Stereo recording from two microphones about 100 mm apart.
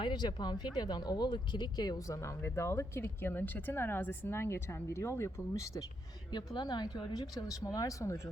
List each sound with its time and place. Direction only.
0.0 s speech: 50° left (ahead or behind); by 5.8 s 30° left (ahead or behind)
6.3 s speech: 45° left (ahead or behind)